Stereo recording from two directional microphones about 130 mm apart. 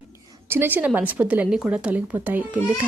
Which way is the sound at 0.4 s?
15° right (ahead or behind).